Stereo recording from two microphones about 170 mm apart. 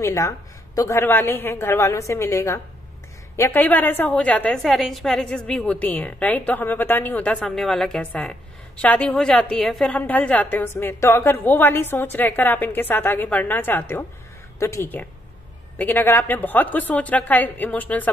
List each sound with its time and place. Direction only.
0.0 s a woman's voice: 15° left (ahead or behind)